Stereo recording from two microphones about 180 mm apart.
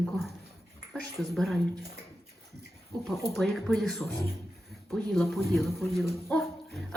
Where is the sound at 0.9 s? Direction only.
Centre (ahead or behind).